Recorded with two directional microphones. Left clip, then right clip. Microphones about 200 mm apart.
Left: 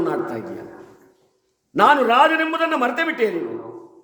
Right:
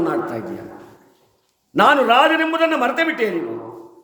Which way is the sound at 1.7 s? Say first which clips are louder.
Right 1 dB; centre (ahead or behind).